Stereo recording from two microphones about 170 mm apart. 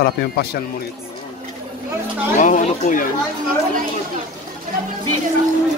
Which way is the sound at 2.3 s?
45° left (ahead or behind).